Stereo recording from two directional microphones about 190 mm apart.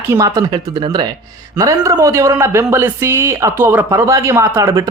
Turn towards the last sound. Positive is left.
turn(degrees=-15)  # may be behind; listen again after turning